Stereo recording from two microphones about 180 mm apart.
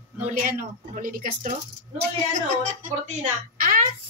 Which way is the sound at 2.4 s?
40° right (ahead or behind).